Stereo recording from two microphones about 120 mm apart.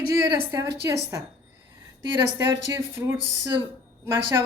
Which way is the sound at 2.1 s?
20° right (ahead or behind).